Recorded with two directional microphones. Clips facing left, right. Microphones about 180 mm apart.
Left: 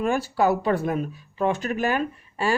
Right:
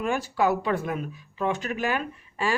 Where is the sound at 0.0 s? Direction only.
40° left (ahead or behind).